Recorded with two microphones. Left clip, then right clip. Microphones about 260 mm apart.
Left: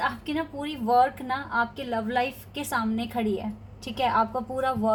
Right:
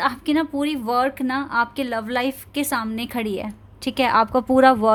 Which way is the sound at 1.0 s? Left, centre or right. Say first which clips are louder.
Right 2 dB; right.